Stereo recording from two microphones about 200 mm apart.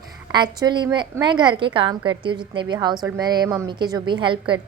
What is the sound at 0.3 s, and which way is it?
A woman's voice, 20° right (ahead or behind).